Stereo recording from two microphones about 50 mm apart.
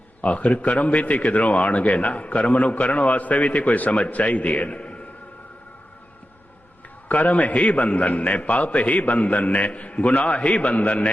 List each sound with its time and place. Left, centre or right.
0.2 s a man's voice: left
7.1 s a man's voice: left